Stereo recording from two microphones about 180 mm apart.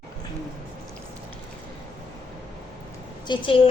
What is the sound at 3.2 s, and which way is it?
Speech, 25° left (ahead or behind).